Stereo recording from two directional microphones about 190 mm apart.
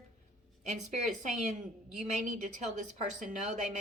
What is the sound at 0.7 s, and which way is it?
A woman's voice, 40° right (ahead or behind).